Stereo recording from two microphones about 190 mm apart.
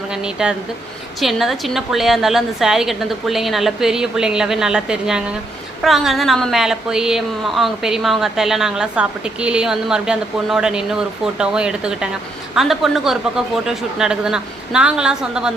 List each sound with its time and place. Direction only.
0.1 s a woman's voice: 5° right (ahead or behind)